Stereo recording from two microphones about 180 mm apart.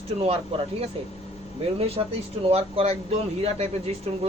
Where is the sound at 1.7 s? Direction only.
35° right (ahead or behind).